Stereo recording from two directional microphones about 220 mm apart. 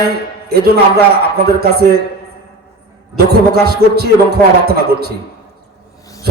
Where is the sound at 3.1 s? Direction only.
45° right (ahead or behind).